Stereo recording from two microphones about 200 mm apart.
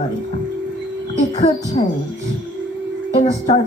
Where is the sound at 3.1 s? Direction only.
35° left (ahead or behind).